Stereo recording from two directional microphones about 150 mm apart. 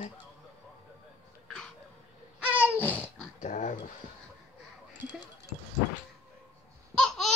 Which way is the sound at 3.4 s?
55° left (ahead or behind).